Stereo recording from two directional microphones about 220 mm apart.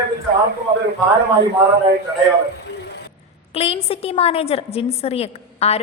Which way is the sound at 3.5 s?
25° left (ahead or behind).